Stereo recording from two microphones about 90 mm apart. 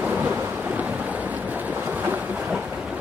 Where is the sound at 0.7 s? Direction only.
15° right (ahead or behind).